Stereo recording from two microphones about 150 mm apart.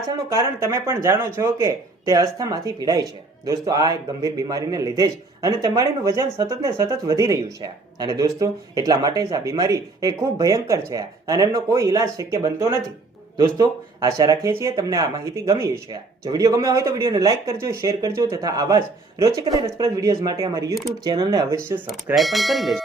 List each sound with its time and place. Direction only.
0.3 s a man's voice: 20° right (ahead or behind)
22.1 s speech: centre (ahead or behind)